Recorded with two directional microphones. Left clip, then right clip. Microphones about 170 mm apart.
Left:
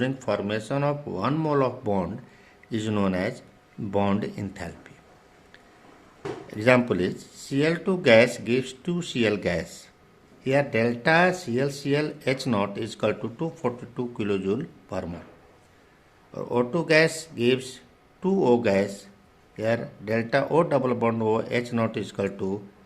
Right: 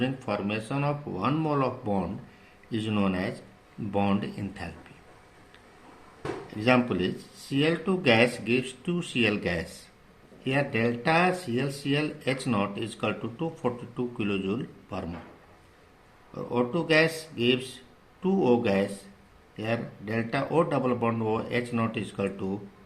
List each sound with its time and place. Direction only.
0.0 s speech: 50° left (ahead or behind)
6.6 s speech: 45° left (ahead or behind)
16.3 s speech: 50° left (ahead or behind)